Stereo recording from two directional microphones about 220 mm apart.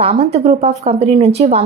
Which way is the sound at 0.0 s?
30° right (ahead or behind).